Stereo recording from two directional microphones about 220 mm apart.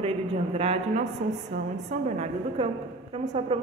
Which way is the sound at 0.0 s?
25° right (ahead or behind).